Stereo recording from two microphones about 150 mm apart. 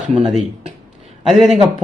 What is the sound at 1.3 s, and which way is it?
Speech, centre (ahead or behind).